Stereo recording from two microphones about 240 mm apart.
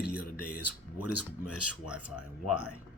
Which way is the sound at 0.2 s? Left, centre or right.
Left.